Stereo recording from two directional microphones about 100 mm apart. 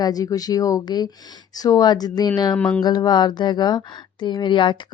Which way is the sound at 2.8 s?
45° left (ahead or behind).